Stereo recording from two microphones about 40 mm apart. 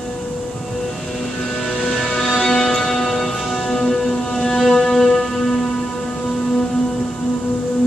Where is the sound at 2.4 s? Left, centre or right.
Centre.